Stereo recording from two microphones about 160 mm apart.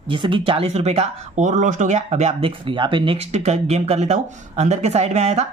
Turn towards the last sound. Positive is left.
turn(degrees=-45)  # may be behind; listen again after turning